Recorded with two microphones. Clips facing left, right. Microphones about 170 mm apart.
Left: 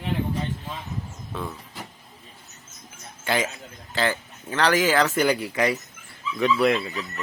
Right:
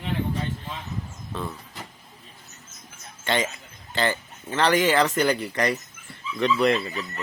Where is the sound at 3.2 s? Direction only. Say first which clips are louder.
Even; 5° left (ahead or behind).